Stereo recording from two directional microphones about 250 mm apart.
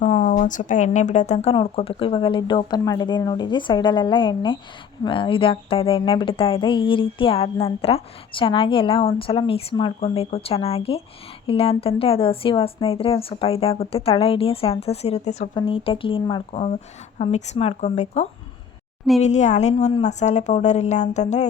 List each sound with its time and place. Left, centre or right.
0.0 s speech: left